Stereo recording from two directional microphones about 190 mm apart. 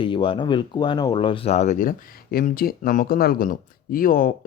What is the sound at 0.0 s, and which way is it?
Speech, 25° left (ahead or behind).